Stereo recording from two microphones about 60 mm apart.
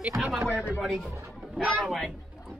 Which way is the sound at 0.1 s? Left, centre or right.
Centre.